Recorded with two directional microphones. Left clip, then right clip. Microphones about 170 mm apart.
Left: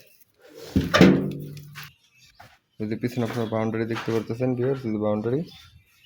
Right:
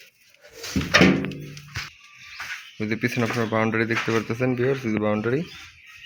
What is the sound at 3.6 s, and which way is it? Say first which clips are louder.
Speech: right 6 dB; 5° left (ahead or behind).